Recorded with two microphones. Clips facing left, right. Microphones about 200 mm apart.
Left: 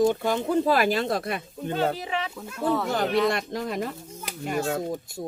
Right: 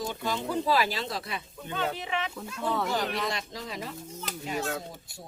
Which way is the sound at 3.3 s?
55° left (ahead or behind).